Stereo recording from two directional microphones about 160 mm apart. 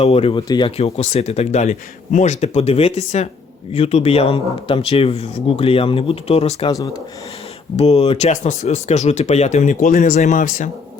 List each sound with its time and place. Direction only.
0.0 s speech: 35° left (ahead or behind)
0.8 s speech: 40° left (ahead or behind)
6.7 s speech: 25° left (ahead or behind)
7.8 s speech: 40° left (ahead or behind)